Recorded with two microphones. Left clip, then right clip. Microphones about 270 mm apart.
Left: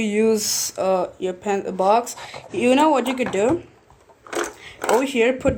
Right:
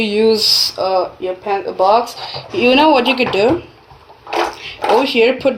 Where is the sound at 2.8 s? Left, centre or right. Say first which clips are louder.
Right 7 dB; left.